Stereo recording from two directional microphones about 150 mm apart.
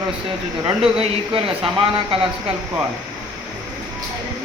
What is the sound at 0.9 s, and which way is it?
Speech, 40° right (ahead or behind).